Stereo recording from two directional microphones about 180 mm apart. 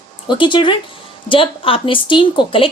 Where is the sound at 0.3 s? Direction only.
25° left (ahead or behind).